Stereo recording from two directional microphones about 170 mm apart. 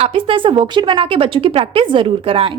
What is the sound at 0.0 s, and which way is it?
Speech, 30° right (ahead or behind).